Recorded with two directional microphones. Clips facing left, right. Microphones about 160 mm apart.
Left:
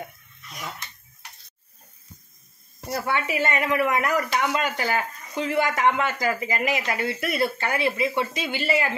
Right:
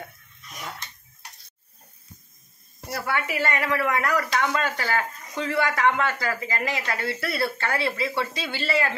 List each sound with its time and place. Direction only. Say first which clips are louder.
2.9 s speech: left 2 dB; 20° left (ahead or behind)